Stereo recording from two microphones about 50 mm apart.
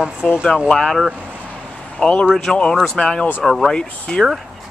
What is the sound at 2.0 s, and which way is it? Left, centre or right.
A man's voice, centre.